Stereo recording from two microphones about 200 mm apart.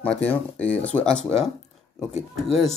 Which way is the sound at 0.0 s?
5° left (ahead or behind).